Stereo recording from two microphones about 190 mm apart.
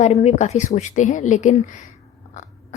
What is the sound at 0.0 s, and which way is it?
Speech, 35° left (ahead or behind).